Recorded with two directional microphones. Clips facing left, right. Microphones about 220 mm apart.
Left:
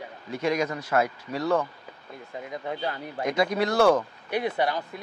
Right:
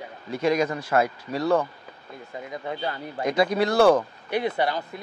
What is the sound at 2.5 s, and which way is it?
Speech, centre (ahead or behind).